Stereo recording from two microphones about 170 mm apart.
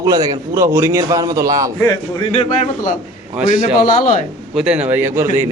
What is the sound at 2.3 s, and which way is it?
Speech, 40° left (ahead or behind).